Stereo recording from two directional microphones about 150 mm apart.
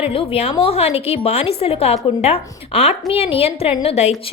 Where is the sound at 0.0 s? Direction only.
35° left (ahead or behind).